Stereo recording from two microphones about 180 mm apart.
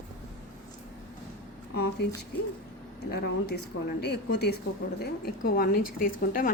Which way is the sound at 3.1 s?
60° left (ahead or behind).